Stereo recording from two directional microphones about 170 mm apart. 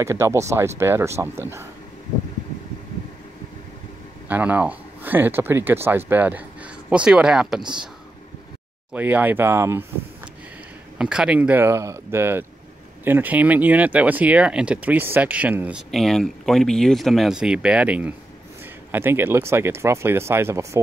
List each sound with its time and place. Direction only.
0.0 s speech: 15° right (ahead or behind)
4.3 s speech: 10° right (ahead or behind)
8.9 s speech: 10° right (ahead or behind)
11.0 s speech: 5° right (ahead or behind)